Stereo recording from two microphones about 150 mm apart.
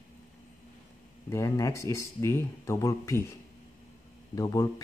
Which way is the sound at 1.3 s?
20° left (ahead or behind).